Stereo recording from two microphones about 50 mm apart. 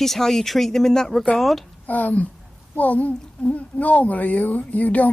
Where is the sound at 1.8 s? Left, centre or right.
Left.